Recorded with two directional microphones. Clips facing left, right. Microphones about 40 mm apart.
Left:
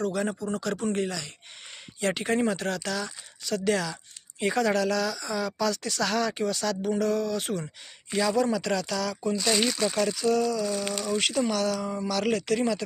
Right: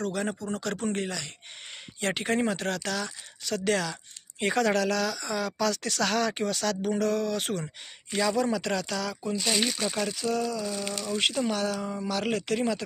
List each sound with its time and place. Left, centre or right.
0.0 s a woman's voice: right
8.5 s speech: right
9.2 s speech: centre
10.8 s speech: centre
11.5 s speech: centre